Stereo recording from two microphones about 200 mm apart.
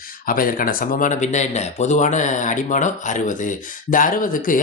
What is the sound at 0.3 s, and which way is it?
Speech, 45° left (ahead or behind).